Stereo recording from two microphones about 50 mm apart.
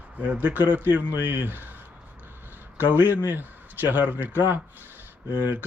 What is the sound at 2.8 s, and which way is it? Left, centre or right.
A man's voice, right.